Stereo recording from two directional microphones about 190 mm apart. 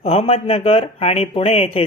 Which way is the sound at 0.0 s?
30° left (ahead or behind).